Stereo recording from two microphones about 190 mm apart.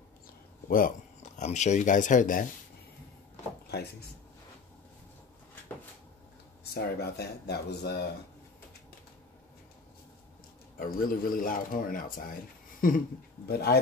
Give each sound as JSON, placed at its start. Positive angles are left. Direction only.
{"t": 0.7, "sound": "speech", "side_deg": 45}
{"t": 6.7, "sound": "speech", "side_deg": 55}
{"t": 10.8, "sound": "speech", "side_deg": 45}